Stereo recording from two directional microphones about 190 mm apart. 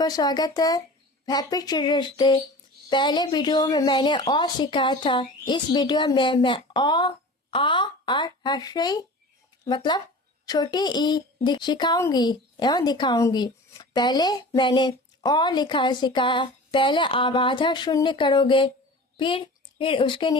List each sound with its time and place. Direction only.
0.0 s a woman's voice: 20° left (ahead or behind)